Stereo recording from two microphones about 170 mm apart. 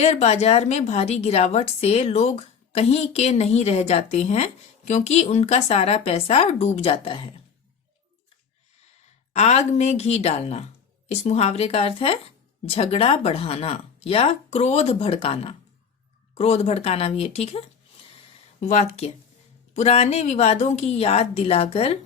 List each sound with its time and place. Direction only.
0.0 s a woman's voice: 40° left (ahead or behind)
9.3 s a woman's voice: 40° left (ahead or behind)